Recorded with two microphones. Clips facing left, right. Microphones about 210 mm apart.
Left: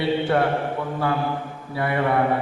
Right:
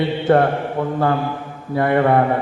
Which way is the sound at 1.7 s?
50° right (ahead or behind).